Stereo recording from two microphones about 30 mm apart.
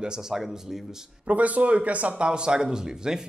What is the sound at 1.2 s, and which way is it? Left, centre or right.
Speech, right.